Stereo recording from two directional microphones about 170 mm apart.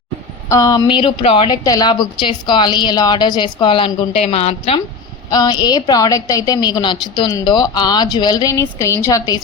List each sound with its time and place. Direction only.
0.4 s a woman's voice: 20° left (ahead or behind); by 4.8 s 35° left (ahead or behind)
5.3 s a woman's voice: 25° left (ahead or behind)